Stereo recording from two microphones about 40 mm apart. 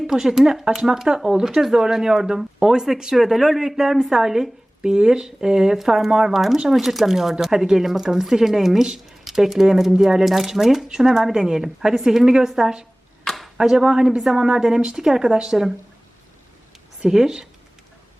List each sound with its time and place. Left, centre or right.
0.1 s speech: centre
17.0 s speech: centre